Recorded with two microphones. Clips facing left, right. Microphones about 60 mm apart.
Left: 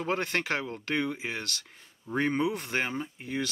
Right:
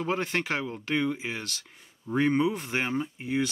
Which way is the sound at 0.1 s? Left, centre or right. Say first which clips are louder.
Even; centre.